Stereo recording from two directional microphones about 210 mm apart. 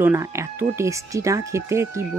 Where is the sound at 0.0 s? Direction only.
10° right (ahead or behind).